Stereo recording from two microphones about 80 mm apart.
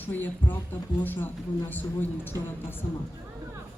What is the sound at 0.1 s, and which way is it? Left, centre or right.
A woman's voice, left.